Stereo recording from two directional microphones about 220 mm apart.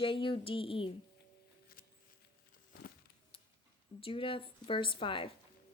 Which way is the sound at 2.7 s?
45° left (ahead or behind).